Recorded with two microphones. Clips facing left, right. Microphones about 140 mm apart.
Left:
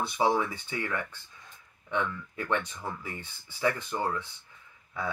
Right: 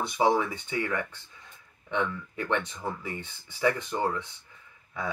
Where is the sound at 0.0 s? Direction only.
20° right (ahead or behind).